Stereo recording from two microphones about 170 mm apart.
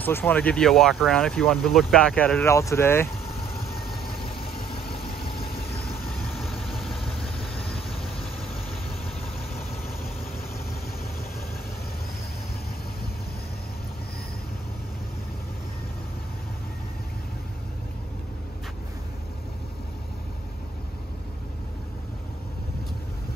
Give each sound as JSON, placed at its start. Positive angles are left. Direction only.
{"t": 0.0, "sound": "speech", "side_deg": 10}
{"t": 3.6, "sound": "vehicle", "side_deg": 65}
{"t": 4.4, "sound": "vehicle", "side_deg": 30}
{"t": 6.3, "sound": "vehicle", "side_deg": 0}